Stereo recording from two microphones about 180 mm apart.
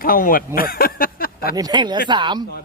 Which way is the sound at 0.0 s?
50° left (ahead or behind).